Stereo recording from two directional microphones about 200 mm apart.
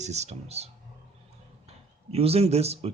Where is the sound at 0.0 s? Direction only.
35° right (ahead or behind).